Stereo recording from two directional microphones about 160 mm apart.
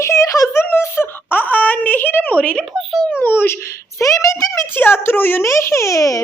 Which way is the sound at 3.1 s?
10° left (ahead or behind).